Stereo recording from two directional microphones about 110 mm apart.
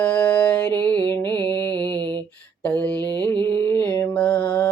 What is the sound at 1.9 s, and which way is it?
Mantra, 40° right (ahead or behind).